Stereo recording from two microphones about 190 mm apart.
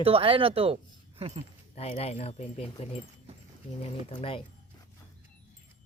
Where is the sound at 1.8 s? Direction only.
35° left (ahead or behind).